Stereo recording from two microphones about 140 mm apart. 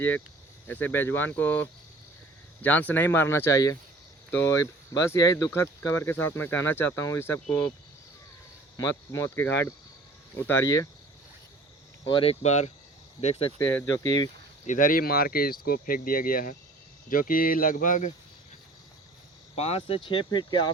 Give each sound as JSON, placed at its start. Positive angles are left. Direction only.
{"t": 0.7, "sound": "speech", "side_deg": 10}
{"t": 8.7, "sound": "speech", "side_deg": 25}
{"t": 12.0, "sound": "speech", "side_deg": 40}
{"t": 13.6, "sound": "speech", "side_deg": 15}
{"t": 14.0, "sound": "speech", "side_deg": 25}
{"t": 14.7, "sound": "speech", "side_deg": 80}
{"t": 19.5, "sound": "speech", "side_deg": 45}